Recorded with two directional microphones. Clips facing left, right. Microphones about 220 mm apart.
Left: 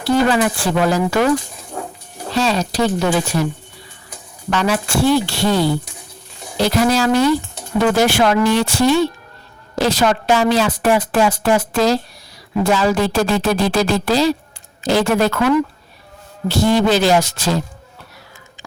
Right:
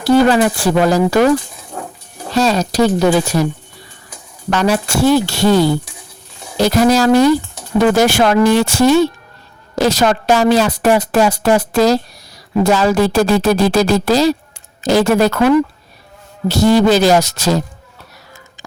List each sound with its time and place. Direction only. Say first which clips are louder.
0.0 s speech: right 4 dB; 40° right (ahead or behind)
2.3 s speech: right 4 dB; 40° right (ahead or behind)
4.4 s speech: right 3 dB; 40° right (ahead or behind)
6.6 s speech: right 4 dB; 45° right (ahead or behind)